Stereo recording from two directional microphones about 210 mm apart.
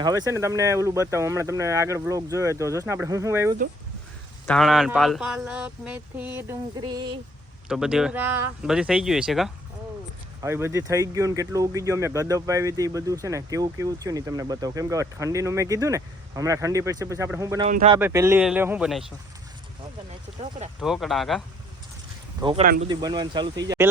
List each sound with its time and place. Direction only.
0.0 s speech: 15° right (ahead or behind)
4.4 s speech: centre (ahead or behind); by 7.1 s 20° right (ahead or behind)
7.7 s speech: 5° right (ahead or behind)
10.4 s speech: 15° right (ahead or behind)
17.7 s speech: 35° right (ahead or behind)
18.0 s speech: 10° right (ahead or behind)
20.8 s speech: centre (ahead or behind)
22.4 s speech: 25° right (ahead or behind)